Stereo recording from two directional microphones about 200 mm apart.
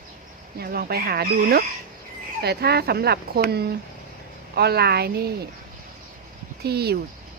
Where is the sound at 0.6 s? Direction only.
50° right (ahead or behind).